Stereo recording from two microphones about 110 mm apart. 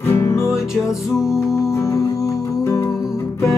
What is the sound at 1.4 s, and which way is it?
Music, 25° left (ahead or behind).